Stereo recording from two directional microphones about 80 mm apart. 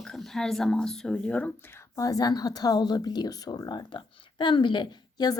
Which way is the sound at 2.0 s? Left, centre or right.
Left.